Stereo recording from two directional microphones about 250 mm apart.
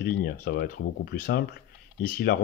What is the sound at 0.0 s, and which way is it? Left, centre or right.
Speech, left.